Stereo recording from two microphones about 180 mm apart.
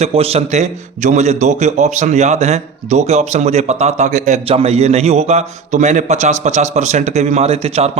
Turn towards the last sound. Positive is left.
turn(degrees=-35)  # may be behind; listen again after turning